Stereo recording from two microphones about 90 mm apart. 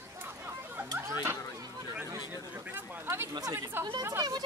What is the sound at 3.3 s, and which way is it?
Speech, 45° right (ahead or behind).